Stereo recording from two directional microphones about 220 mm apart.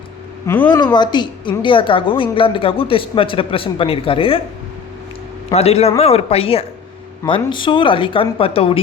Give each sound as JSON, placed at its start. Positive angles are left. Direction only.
{"t": 0.4, "sound": "speech", "side_deg": 10}
{"t": 0.9, "sound": "a woman's voice", "side_deg": 20}
{"t": 5.5, "sound": "a woman's voice", "side_deg": 30}